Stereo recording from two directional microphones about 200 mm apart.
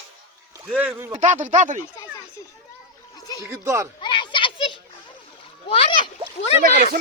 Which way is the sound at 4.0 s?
25° left (ahead or behind).